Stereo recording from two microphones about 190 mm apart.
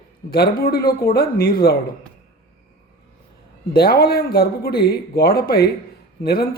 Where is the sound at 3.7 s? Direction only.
55° left (ahead or behind).